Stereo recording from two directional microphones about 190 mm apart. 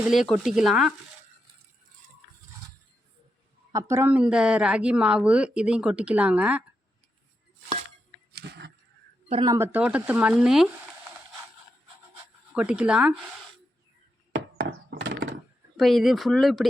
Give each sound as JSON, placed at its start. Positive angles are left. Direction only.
{"t": 0.0, "sound": "a woman's voice", "side_deg": 0}
{"t": 3.7, "sound": "a woman's voice", "side_deg": -15}
{"t": 8.4, "sound": "a sound", "side_deg": -60}
{"t": 9.3, "sound": "speech", "side_deg": -25}
{"t": 9.6, "sound": "speech", "side_deg": -5}
{"t": 12.5, "sound": "a woman's voice", "side_deg": -5}
{"t": 14.3, "sound": "chop", "side_deg": -70}
{"t": 15.0, "sound": "a sound", "side_deg": -55}
{"t": 15.8, "sound": "a woman's voice", "side_deg": 0}